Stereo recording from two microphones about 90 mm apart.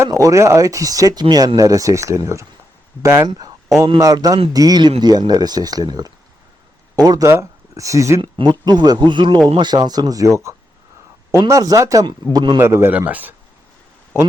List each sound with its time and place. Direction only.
0.0 s speech: 35° right (ahead or behind)
1.5 s a man's voice: 40° right (ahead or behind)
3.2 s speech: 45° right (ahead or behind)
4.8 s speech: 55° right (ahead or behind)
7.3 s speech: 35° right (ahead or behind)
8.2 s speech: 60° right (ahead or behind); by 12.0 s 40° right (ahead or behind)
12.0 s speech: 50° right (ahead or behind)
12.5 s a man's voice: 30° right (ahead or behind)
12.9 s speech: 15° right (ahead or behind)